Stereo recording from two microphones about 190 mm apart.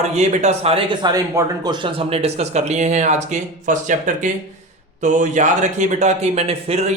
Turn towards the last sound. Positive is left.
turn(degrees=-35)  # may be behind; listen again after turning